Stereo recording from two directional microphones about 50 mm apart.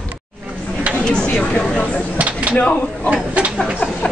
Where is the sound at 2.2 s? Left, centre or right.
Right.